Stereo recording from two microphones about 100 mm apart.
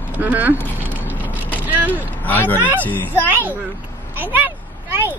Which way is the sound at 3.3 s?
20° right (ahead or behind).